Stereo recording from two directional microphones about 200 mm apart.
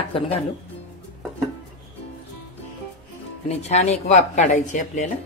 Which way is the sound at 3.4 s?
35° left (ahead or behind).